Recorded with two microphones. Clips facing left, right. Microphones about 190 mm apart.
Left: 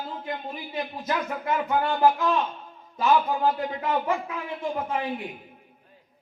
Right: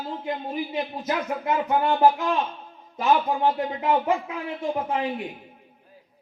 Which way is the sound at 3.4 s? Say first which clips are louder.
Right 1 dB; 20° right (ahead or behind).